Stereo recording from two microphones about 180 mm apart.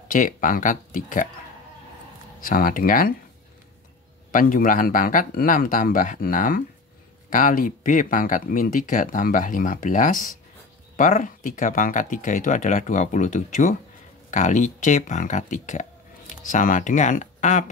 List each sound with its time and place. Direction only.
0.1 s speech: 50° left (ahead or behind)
2.4 s speech: 50° left (ahead or behind)
4.3 s speech: 50° left (ahead or behind)